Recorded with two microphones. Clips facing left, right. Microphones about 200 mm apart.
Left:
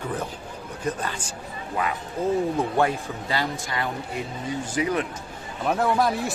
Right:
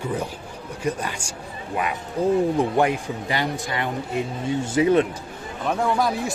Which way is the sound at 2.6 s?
15° right (ahead or behind).